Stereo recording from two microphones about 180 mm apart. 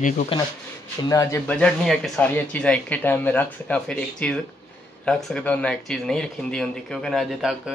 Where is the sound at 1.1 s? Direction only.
15° left (ahead or behind); by 7.7 s centre (ahead or behind).